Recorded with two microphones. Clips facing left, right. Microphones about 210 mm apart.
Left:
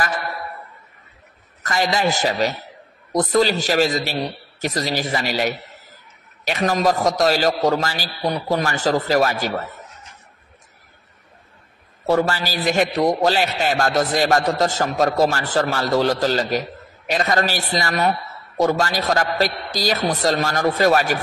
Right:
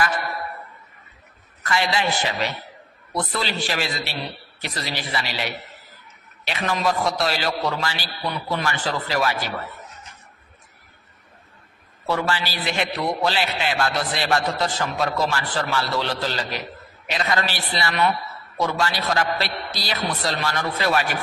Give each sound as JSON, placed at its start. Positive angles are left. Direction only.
{"t": 1.6, "sound": "a man's voice", "side_deg": 40}
{"t": 12.1, "sound": "a man's voice", "side_deg": 40}